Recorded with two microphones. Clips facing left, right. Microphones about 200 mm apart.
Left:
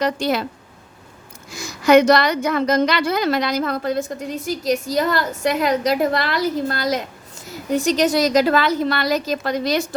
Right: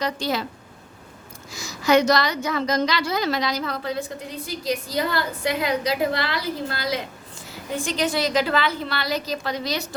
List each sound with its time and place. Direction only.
1.8 s a woman's voice: 55° left (ahead or behind)